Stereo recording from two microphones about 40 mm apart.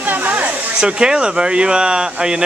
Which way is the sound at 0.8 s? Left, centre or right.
Right.